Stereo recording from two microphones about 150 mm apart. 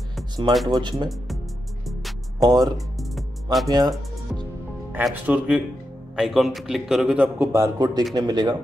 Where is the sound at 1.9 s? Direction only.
Centre (ahead or behind).